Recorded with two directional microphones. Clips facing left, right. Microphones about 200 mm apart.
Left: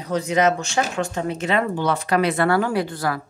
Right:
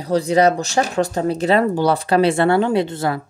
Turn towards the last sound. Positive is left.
turn(degrees=-25)  # may be behind; listen again after turning